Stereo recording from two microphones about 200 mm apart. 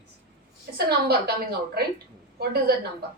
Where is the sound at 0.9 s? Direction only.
55° right (ahead or behind).